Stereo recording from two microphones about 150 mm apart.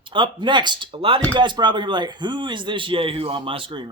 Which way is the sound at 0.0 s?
30° right (ahead or behind).